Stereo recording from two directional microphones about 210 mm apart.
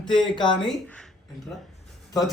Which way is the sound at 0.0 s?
20° left (ahead or behind).